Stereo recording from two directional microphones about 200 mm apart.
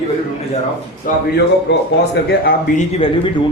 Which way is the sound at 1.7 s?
60° left (ahead or behind).